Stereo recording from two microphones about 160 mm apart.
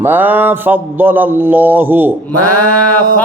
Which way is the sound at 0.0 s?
10° right (ahead or behind).